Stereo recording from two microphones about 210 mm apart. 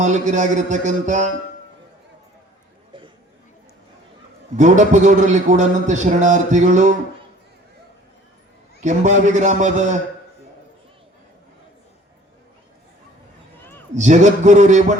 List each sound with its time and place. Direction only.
0.0 s a man's voice: 35° right (ahead or behind)
4.5 s a man's voice: 35° right (ahead or behind)
8.8 s a man's voice: 35° right (ahead or behind)
13.9 s a man's voice: 35° right (ahead or behind)